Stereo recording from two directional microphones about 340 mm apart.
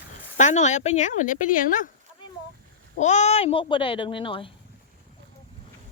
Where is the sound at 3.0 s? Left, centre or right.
Centre.